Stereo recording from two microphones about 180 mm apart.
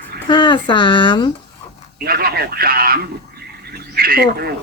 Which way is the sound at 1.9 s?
55° right (ahead or behind).